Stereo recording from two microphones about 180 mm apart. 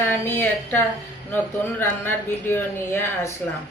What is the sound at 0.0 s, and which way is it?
Speech, 10° left (ahead or behind).